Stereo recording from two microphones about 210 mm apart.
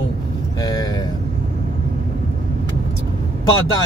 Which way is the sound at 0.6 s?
20° left (ahead or behind).